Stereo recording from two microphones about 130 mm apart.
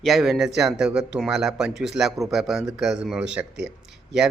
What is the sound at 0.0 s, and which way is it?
A man's voice, centre (ahead or behind).